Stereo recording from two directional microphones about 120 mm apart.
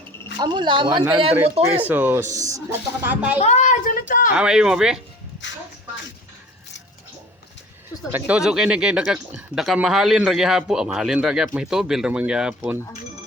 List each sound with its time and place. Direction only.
0.3 s speech: 40° right (ahead or behind); by 1.7 s 55° right (ahead or behind)
1.9 s speech: 15° right (ahead or behind)
3.1 s speech: 10° right (ahead or behind)
3.4 s speech: 80° left
4.4 s speech: 5° right (ahead or behind)
8.1 s speech: 10° right (ahead or behind)